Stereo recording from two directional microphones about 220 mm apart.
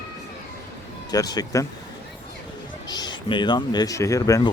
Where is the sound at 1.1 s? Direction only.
15° left (ahead or behind).